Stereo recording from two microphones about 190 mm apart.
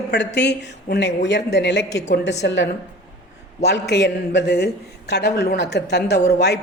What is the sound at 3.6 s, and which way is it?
A man's voice, 60° left (ahead or behind).